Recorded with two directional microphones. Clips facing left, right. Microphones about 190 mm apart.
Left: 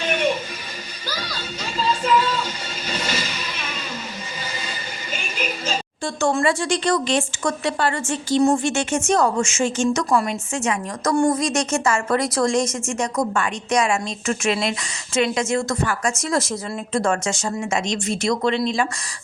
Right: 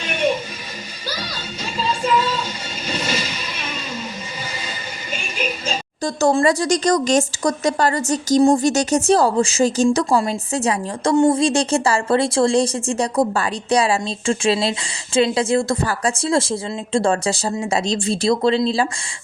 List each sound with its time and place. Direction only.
6.0 s speech: 40° right (ahead or behind)